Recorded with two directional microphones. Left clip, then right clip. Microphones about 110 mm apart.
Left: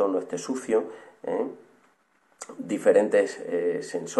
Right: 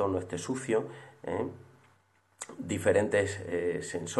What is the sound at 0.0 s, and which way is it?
Speech, 15° right (ahead or behind).